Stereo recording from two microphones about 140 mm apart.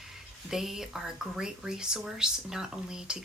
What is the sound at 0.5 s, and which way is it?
Speech, 5° right (ahead or behind).